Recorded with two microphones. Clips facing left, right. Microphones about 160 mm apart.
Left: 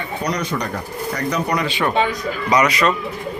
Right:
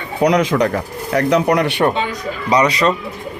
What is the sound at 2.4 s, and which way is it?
Speech, 30° right (ahead or behind).